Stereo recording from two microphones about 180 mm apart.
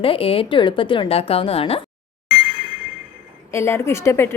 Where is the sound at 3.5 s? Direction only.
15° left (ahead or behind).